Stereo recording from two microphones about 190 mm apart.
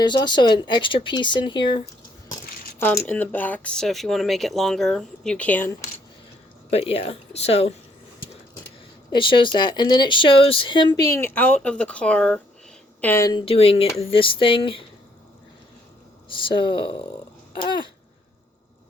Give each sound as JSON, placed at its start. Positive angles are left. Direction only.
{"t": 0.0, "sound": "speech", "side_deg": 25}
{"t": 2.8, "sound": "speech", "side_deg": 10}
{"t": 6.7, "sound": "speech", "side_deg": 30}
{"t": 9.1, "sound": "speech", "side_deg": 25}
{"t": 16.3, "sound": "speech", "side_deg": 25}
{"t": 17.5, "sound": "babbling", "side_deg": 25}